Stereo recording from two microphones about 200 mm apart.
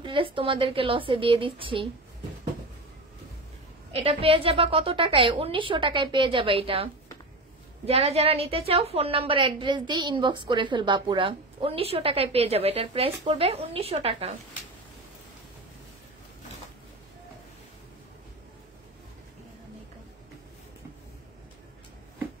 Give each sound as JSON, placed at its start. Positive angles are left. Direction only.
{"t": 0.0, "sound": "a woman's voice", "side_deg": -25}
{"t": 3.9, "sound": "a woman's voice", "side_deg": -30}